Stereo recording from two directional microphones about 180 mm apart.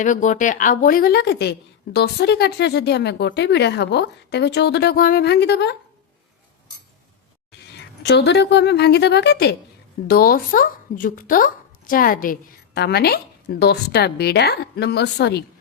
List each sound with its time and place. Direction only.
0.0 s a woman's voice: 45° left (ahead or behind); by 5.7 s 70° left (ahead or behind)
7.6 s speech: 70° left (ahead or behind)
10.1 s a woman's voice: 55° left (ahead or behind)